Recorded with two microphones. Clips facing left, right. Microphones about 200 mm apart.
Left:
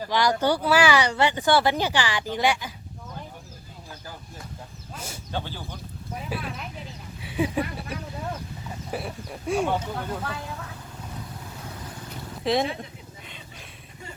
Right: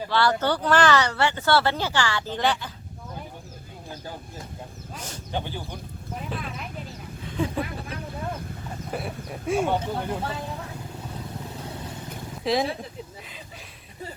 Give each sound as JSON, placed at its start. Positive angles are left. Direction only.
{"t": 0.1, "sound": "speech", "side_deg": 15}
{"t": 4.9, "sound": "speech", "side_deg": 10}
{"t": 5.3, "sound": "speech", "side_deg": -15}
{"t": 6.3, "sound": "speech", "side_deg": 5}
{"t": 8.9, "sound": "speech", "side_deg": 0}
{"t": 10.0, "sound": "speech", "side_deg": -25}
{"t": 12.4, "sound": "speech", "side_deg": 0}